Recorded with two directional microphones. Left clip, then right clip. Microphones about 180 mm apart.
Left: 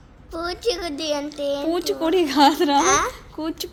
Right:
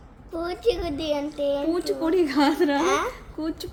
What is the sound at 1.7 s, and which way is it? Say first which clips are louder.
A woman's voice: left 3 dB; 25° left (ahead or behind).